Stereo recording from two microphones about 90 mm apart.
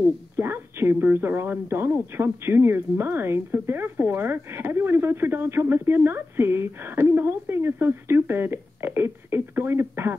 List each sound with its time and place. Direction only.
0.4 s a woman's voice: 25° right (ahead or behind)